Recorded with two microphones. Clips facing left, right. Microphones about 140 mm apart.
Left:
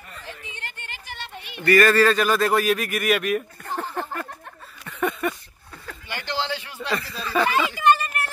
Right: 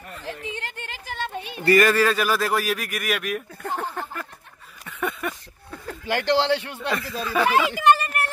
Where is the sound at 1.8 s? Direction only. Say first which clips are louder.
Left 2 dB; 10° right (ahead or behind).